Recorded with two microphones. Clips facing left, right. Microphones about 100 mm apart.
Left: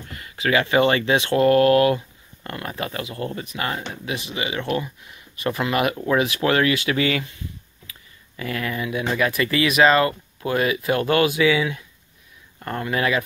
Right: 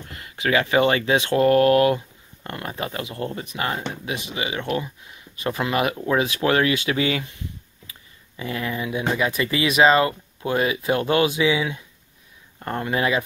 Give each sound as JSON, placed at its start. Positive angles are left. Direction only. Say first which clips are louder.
{"t": 0.1, "sound": "speech", "louder": "left 1 dB", "side_deg": -20}
{"t": 8.4, "sound": "speech", "louder": "even", "side_deg": -20}